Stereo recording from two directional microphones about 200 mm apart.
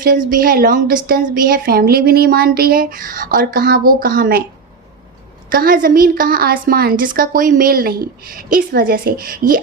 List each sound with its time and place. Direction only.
0.0 s a woman's voice: 45° right (ahead or behind)
5.5 s a woman's voice: 45° right (ahead or behind)